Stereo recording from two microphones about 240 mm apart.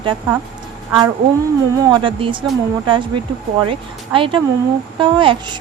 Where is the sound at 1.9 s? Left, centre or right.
Right.